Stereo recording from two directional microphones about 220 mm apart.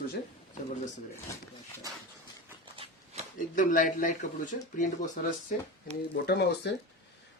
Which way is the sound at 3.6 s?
35° left (ahead or behind).